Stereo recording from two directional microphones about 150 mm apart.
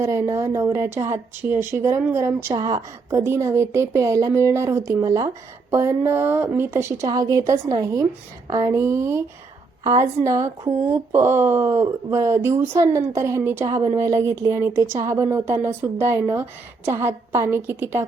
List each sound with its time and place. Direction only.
0.0 s a woman's voice: 20° right (ahead or behind)